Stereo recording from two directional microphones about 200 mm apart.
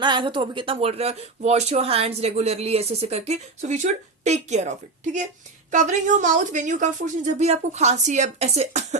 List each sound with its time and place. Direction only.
0.0 s speech: 25° right (ahead or behind)
5.7 s speech: 40° right (ahead or behind)